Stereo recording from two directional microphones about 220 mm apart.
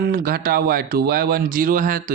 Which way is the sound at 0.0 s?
40° right (ahead or behind).